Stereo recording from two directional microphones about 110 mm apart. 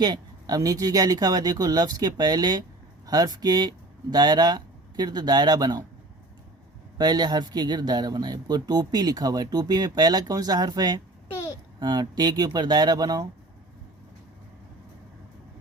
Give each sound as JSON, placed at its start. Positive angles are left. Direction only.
{"t": 0.0, "sound": "speech", "side_deg": -35}
{"t": 7.0, "sound": "speech", "side_deg": -40}